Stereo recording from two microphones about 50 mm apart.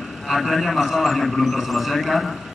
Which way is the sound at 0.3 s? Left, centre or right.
Centre.